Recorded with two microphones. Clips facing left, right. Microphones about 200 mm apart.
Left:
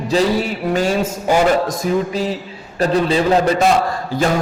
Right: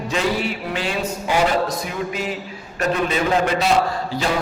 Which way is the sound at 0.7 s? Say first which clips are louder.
Left 9 dB; 45° left (ahead or behind).